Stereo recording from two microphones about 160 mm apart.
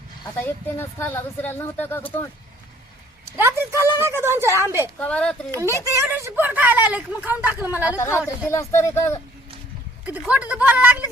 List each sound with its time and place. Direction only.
0.3 s speech: 15° left (ahead or behind)
3.3 s speech: 15° right (ahead or behind)
4.9 s speech: 10° left (ahead or behind)
5.9 s speech: 20° right (ahead or behind)
7.9 s speech: 15° left (ahead or behind)
10.1 s speech: 10° right (ahead or behind)